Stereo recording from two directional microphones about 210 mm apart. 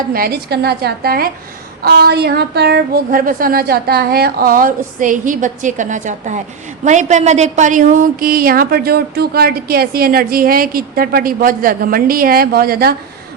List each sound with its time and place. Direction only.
0.1 s a woman's voice: 45° right (ahead or behind)